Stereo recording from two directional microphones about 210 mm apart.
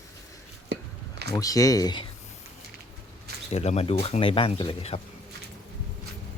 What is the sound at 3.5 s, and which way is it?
Speech, 30° left (ahead or behind).